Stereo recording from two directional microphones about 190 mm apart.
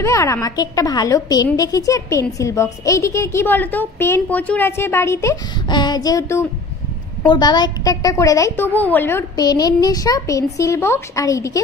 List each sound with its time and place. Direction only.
0.0 s a woman's voice: 15° left (ahead or behind)